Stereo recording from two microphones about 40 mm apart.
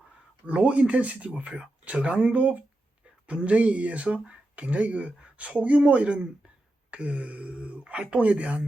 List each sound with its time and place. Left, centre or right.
0.4 s speech: right